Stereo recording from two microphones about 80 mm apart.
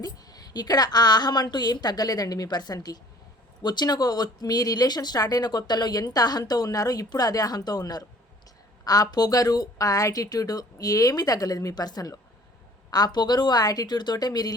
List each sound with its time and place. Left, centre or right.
0.0 s a woman's voice: left